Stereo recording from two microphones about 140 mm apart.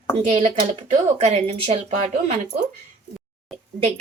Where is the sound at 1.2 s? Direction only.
50° right (ahead or behind).